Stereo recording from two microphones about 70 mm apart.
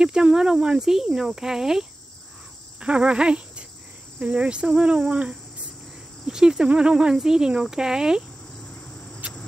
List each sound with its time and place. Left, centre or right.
0.0 s speech: centre